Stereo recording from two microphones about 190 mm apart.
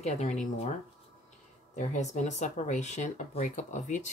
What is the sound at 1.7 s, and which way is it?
Speech, 40° left (ahead or behind).